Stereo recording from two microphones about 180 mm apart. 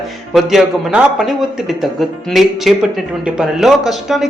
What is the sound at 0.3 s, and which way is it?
A man's voice, centre (ahead or behind).